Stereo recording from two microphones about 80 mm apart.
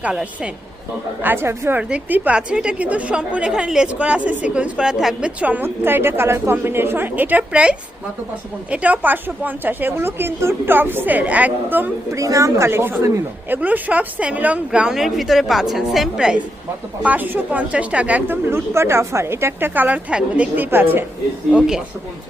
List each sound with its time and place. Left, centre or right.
0.0 s a woman's voice: centre
1.2 s a woman's voice: right
1.8 s a woman's voice: centre
5.4 s a woman's voice: centre
12.1 s speech: right
13.5 s a woman's voice: right
17.0 s a woman's voice: right
18.3 s a woman's voice: right